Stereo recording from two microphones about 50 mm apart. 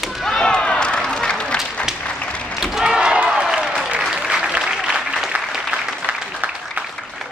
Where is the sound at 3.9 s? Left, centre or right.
Centre.